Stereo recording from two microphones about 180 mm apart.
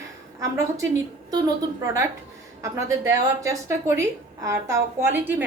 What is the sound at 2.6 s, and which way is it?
A woman's voice, 15° right (ahead or behind).